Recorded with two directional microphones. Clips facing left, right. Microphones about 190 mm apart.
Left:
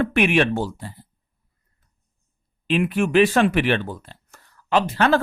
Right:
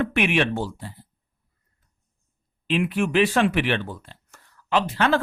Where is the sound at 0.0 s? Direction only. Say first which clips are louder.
Left 3 dB; 45° left (ahead or behind).